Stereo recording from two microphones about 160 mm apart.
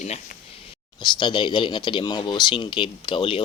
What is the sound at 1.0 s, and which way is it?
Speech, 30° left (ahead or behind).